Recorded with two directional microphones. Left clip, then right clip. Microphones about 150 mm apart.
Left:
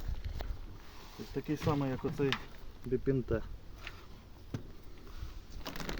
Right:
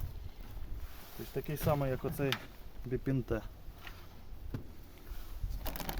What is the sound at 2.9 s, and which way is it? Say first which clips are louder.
Speech: left 3 dB; 70° right (ahead or behind).